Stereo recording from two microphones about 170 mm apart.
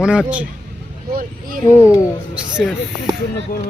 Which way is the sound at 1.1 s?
55° right (ahead or behind).